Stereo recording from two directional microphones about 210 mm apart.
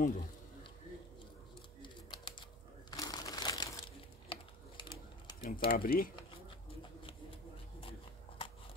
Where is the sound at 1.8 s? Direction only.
20° left (ahead or behind).